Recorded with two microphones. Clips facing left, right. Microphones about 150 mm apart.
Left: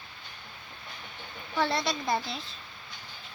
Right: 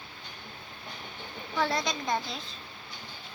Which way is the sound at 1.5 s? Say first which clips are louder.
Left 1 dB; centre (ahead or behind).